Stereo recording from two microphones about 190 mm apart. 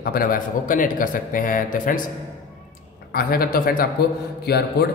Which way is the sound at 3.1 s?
50° left (ahead or behind).